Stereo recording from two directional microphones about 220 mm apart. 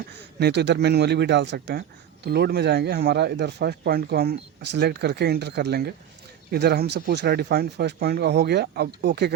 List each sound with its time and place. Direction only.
0.3 s speech: 50° right (ahead or behind)